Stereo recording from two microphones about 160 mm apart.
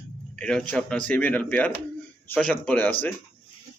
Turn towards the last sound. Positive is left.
turn(degrees=10)  # may be behind; listen again after turning